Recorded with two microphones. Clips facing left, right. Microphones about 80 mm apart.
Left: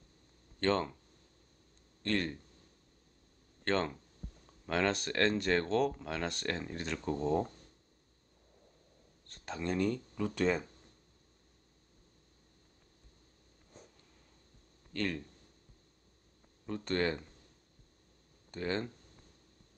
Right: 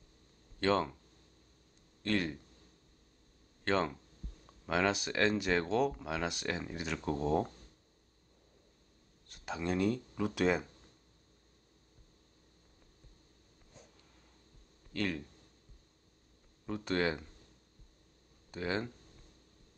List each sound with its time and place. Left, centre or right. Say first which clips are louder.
0.6 s speech: right 1 dB; centre
2.0 s speech: even; centre
3.6 s speech: right 1 dB; centre
9.3 s speech: right 1 dB; centre
14.9 s speech: even; centre
16.6 s speech: even; centre
18.5 s speech: even; centre